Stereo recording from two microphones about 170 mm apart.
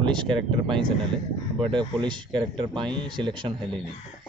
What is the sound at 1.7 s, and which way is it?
Speech, 25° right (ahead or behind).